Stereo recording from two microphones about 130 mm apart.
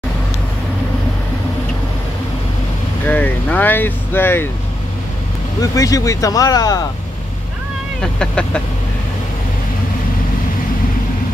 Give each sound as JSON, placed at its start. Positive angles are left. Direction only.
{"t": 3.1, "sound": "speech", "side_deg": 15}
{"t": 5.6, "sound": "speech", "side_deg": 25}
{"t": 8.0, "sound": "speech", "side_deg": 5}